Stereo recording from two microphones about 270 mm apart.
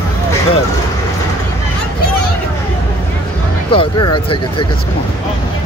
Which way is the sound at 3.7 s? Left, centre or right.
Centre.